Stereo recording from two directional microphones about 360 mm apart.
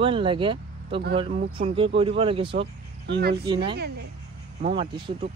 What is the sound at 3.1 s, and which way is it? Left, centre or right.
Speech, right.